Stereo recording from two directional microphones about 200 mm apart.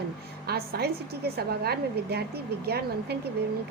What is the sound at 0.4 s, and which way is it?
A woman's voice, 50° right (ahead or behind).